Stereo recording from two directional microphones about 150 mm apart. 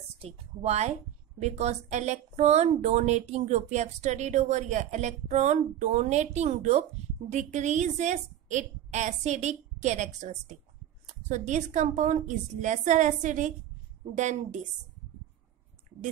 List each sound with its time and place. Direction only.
0.2 s a woman's voice: 45° right (ahead or behind)